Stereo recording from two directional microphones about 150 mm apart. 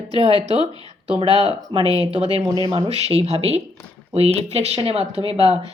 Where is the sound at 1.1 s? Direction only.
35° right (ahead or behind).